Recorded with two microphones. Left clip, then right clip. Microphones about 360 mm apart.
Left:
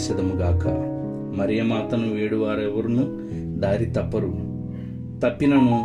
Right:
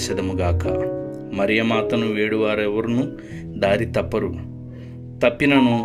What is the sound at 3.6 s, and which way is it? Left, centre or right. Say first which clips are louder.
A man's voice: right 5 dB; right.